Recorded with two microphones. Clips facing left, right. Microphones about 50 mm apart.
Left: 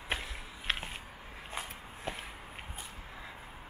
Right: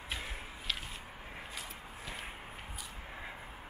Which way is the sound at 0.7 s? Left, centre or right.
Left.